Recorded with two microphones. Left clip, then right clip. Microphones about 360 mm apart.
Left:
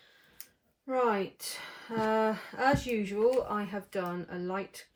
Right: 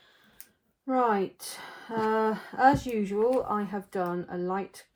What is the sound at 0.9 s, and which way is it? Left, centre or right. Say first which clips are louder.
Speech: right 3 dB; centre.